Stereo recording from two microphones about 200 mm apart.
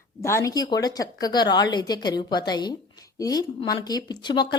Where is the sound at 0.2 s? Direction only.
15° left (ahead or behind).